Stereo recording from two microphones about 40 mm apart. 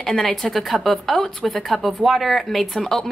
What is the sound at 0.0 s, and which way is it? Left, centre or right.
A woman's voice, centre.